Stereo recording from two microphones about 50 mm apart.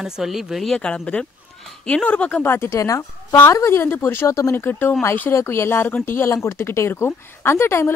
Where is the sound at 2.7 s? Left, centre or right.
Left.